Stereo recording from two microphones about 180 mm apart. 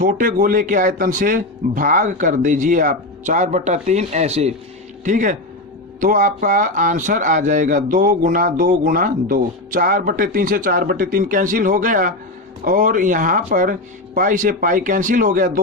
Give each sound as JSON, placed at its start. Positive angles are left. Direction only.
{"t": 0.0, "sound": "speech", "side_deg": -50}